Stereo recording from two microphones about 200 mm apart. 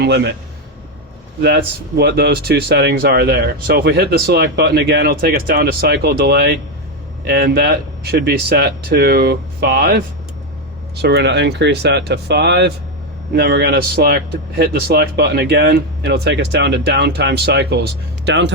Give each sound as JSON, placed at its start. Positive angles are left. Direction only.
{"t": 0.0, "sound": "a man's voice", "side_deg": -60}
{"t": 1.4, "sound": "speech", "side_deg": -55}
{"t": 11.0, "sound": "a man's voice", "side_deg": -55}